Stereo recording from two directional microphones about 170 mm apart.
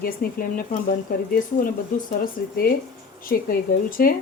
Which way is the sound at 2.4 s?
60° left (ahead or behind).